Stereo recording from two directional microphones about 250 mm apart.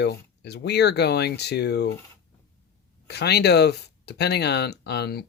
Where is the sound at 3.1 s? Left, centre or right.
Left.